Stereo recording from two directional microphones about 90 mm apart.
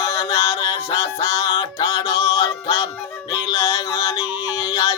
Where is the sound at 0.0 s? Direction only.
40° left (ahead or behind).